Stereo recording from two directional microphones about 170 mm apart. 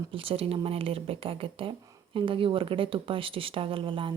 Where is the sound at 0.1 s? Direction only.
35° right (ahead or behind).